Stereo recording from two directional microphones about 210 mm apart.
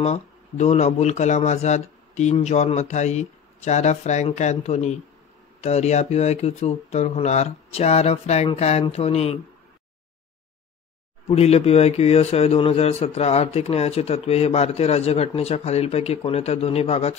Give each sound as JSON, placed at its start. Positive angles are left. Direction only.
{"t": 0.0, "sound": "speech", "side_deg": 30}
{"t": 11.2, "sound": "a man's voice", "side_deg": 30}